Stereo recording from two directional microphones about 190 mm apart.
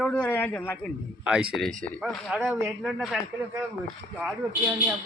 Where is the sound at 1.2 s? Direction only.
5° right (ahead or behind).